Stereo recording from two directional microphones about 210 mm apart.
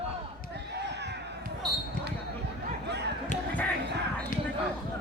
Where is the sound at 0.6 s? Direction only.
55° right (ahead or behind).